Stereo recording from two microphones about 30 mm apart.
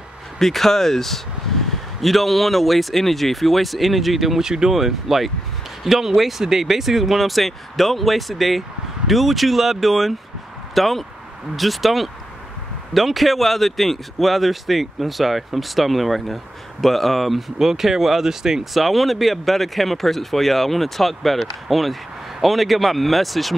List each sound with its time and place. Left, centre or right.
0.4 s speech: centre
4.4 s speech: centre
4.7 s speech: centre
18.6 s speech: centre